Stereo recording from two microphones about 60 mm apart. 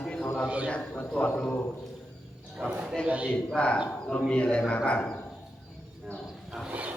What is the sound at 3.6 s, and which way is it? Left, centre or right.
A man's voice, centre.